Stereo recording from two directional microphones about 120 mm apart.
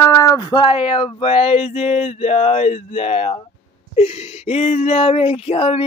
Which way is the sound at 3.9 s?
60° left (ahead or behind).